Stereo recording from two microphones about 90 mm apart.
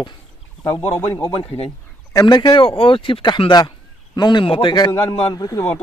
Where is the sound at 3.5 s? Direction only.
55° left (ahead or behind).